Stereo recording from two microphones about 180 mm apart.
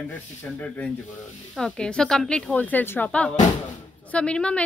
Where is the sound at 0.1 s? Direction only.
10° left (ahead or behind).